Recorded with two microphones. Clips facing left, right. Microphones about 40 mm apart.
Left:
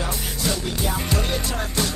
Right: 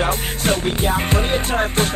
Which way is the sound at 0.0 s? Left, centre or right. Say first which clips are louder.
Right 6 dB; right.